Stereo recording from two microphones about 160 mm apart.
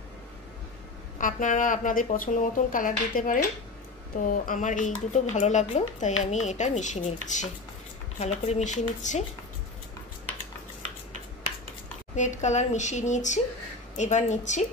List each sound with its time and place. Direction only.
1.1 s speech: 55° left (ahead or behind)
12.2 s speech: 50° left (ahead or behind)